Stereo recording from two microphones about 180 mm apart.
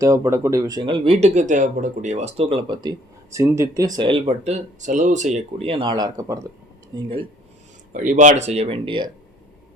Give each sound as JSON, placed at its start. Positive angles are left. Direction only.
{"t": 0.0, "sound": "speech", "side_deg": -15}
{"t": 4.4, "sound": "speech", "side_deg": -40}
{"t": 6.9, "sound": "speech", "side_deg": -30}
{"t": 7.9, "sound": "speech", "side_deg": -45}